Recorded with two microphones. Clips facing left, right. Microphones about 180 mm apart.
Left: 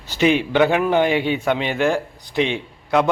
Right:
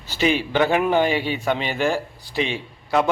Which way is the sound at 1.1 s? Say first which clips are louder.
Left 4 dB; 15° left (ahead or behind).